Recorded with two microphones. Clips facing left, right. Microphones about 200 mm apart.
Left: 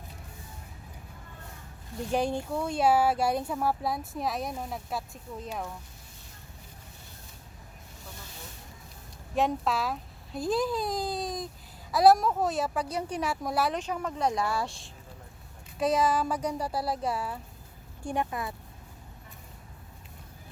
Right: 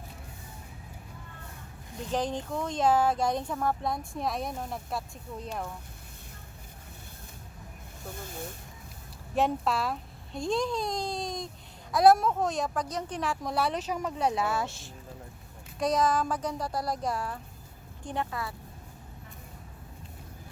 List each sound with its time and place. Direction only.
2.0 s speech: 10° left (ahead or behind)
8.1 s snake: 50° right (ahead or behind)
9.3 s speech: centre (ahead or behind); by 18.5 s 20° left (ahead or behind)